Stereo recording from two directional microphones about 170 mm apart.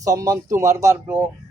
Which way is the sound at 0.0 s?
20° right (ahead or behind).